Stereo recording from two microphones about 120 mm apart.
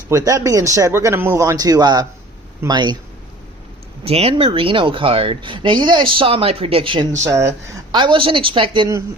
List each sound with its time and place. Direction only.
0.1 s speech: 25° right (ahead or behind)
4.0 s speech: 55° right (ahead or behind)
7.3 s speech: 25° right (ahead or behind)
7.9 s speech: 45° right (ahead or behind)